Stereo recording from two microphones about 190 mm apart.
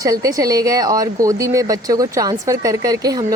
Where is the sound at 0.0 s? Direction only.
20° right (ahead or behind).